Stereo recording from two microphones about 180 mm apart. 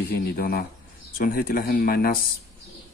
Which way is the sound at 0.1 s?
55° left (ahead or behind).